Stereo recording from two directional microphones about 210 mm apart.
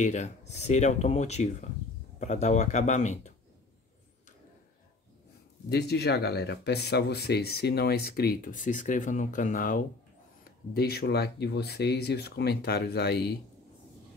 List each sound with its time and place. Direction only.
0.0 s speech: 35° left (ahead or behind)
5.7 s speech: 50° left (ahead or behind)